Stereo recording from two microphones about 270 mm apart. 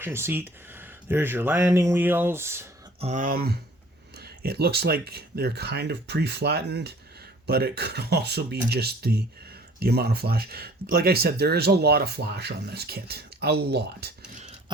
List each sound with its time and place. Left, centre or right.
0.0 s speech: centre
3.0 s speech: right